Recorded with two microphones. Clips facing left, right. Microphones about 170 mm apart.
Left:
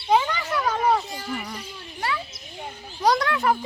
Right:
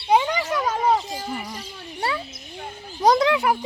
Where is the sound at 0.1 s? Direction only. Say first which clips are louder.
Right 2 dB; 15° right (ahead or behind).